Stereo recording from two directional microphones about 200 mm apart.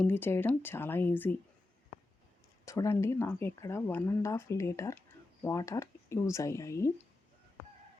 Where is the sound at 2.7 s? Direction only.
15° left (ahead or behind).